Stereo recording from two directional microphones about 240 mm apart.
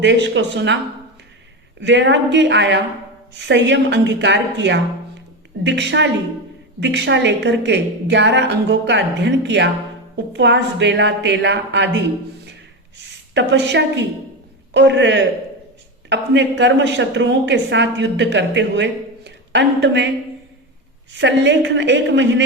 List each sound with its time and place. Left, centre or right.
0.0 s a woman's voice: right
1.8 s a woman's voice: right
13.3 s a woman's voice: right
21.1 s a woman's voice: right